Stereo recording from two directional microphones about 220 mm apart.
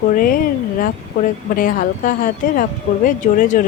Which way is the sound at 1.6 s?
40° left (ahead or behind).